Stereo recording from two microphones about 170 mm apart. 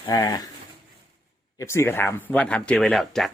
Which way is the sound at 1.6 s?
15° left (ahead or behind).